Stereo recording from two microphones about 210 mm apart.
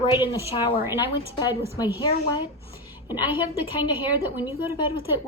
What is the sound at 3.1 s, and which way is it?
A woman's voice, 10° right (ahead or behind).